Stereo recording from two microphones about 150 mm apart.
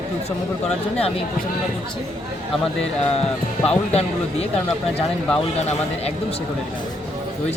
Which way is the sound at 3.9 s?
45° left (ahead or behind).